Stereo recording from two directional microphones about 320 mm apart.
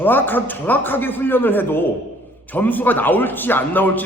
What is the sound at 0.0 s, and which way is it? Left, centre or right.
A man's voice, centre.